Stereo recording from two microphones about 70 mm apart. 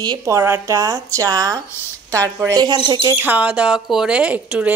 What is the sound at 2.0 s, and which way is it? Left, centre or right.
Speech, right.